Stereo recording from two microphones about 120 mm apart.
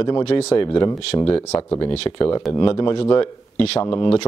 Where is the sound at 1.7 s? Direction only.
45° left (ahead or behind).